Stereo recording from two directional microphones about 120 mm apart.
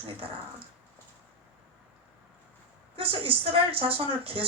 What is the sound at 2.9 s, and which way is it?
Speech, 50° right (ahead or behind).